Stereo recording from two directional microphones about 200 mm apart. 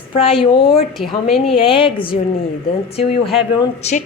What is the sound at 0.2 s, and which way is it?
Speech, 30° left (ahead or behind).